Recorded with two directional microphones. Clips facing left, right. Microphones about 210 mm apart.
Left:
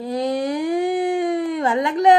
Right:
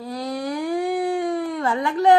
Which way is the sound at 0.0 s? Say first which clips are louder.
Left 6 dB; 20° left (ahead or behind).